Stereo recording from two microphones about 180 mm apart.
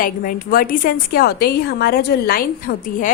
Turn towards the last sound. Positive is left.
turn(degrees=50)  # may be behind; listen again after turning